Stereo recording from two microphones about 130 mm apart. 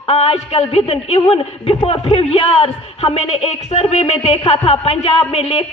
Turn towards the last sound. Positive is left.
turn(degrees=50)  # may be behind; listen again after turning